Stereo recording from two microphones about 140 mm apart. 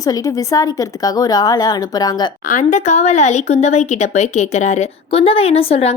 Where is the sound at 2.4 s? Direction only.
65° left (ahead or behind).